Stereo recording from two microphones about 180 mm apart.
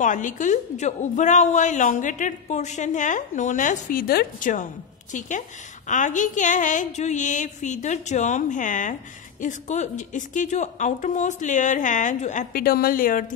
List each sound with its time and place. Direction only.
0.0 s a woman's voice: 45° left (ahead or behind)
5.9 s a woman's voice: 45° left (ahead or behind)